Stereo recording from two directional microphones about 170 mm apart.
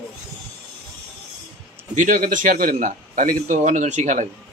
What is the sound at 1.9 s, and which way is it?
A man's voice, 50° right (ahead or behind).